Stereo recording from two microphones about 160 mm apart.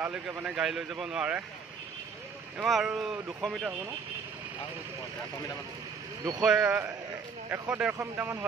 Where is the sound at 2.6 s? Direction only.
Centre (ahead or behind).